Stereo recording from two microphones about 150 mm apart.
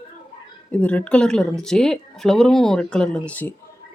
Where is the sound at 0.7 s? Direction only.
10° left (ahead or behind).